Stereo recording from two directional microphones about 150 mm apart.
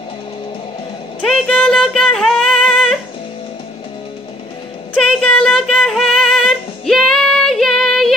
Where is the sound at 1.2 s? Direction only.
5° left (ahead or behind).